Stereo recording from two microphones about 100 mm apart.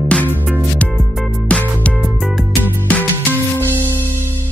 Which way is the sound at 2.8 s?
15° left (ahead or behind).